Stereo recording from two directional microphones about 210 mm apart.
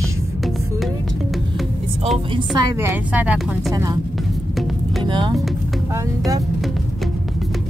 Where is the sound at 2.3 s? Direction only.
15° right (ahead or behind).